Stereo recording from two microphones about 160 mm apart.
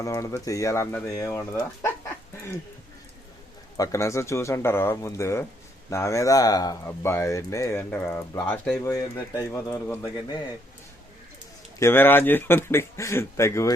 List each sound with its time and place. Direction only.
0.0 s speech: 20° left (ahead or behind)
3.8 s speech: 20° left (ahead or behind)
8.7 s speech: 20° left (ahead or behind)
11.8 s speech: 15° left (ahead or behind)